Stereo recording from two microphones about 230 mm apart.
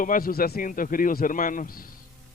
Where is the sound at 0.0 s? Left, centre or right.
Left.